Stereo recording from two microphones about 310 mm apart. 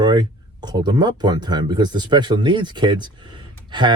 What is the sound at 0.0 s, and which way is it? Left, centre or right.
Speech, centre.